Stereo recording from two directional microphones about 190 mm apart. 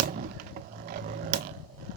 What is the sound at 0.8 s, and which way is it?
Mechanisms, 50° right (ahead or behind).